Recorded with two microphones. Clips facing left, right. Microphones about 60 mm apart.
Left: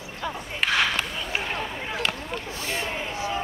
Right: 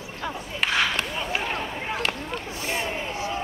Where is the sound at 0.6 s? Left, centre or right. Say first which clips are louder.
Left 1 dB; centre.